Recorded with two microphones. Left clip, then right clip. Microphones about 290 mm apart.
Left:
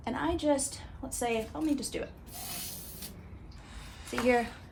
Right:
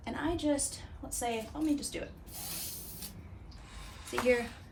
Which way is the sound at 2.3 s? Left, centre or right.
Centre.